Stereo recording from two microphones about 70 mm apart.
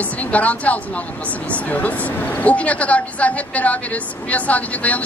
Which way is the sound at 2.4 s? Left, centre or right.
Centre.